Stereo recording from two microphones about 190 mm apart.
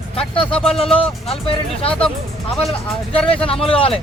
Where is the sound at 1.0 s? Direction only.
30° left (ahead or behind).